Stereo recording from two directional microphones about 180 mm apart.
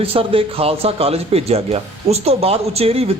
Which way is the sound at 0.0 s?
30° right (ahead or behind).